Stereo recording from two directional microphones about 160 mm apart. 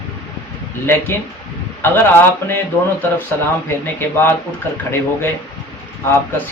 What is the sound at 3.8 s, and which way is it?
Speech, 15° left (ahead or behind).